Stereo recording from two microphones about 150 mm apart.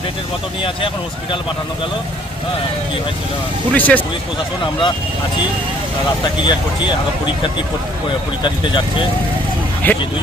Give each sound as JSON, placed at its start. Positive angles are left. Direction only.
{"t": 3.7, "sound": "speech", "side_deg": 10}
{"t": 4.6, "sound": "speech", "side_deg": 30}
{"t": 6.4, "sound": "speech", "side_deg": 30}
{"t": 8.4, "sound": "speech", "side_deg": 30}
{"t": 9.8, "sound": "speech", "side_deg": 10}